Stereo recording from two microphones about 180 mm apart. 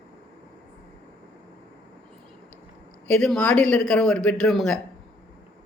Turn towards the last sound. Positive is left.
turn(degrees=0)  # may be behind; listen again after turning